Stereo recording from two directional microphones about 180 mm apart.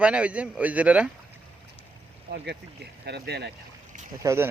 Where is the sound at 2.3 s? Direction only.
65° right (ahead or behind).